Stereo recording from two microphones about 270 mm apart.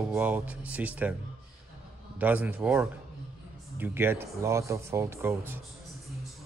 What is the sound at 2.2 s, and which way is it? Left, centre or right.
Speech, centre.